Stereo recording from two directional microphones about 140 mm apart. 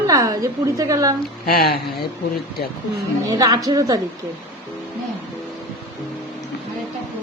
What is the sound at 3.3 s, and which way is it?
Speech, 25° right (ahead or behind).